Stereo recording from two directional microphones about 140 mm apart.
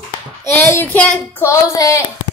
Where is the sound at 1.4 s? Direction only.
20° left (ahead or behind).